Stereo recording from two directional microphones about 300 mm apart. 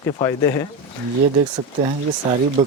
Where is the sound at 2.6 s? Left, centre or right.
Centre.